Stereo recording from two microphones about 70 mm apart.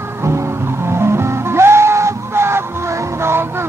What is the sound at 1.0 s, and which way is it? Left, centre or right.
Music, right.